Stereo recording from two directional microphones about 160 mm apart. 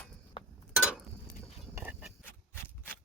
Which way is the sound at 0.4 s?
30° left (ahead or behind).